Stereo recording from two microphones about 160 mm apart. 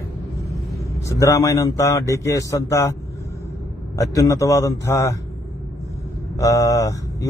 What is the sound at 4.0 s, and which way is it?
A man's voice, 20° left (ahead or behind).